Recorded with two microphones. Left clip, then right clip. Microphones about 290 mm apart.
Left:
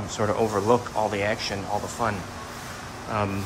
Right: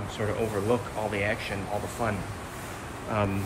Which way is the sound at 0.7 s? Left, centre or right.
Centre.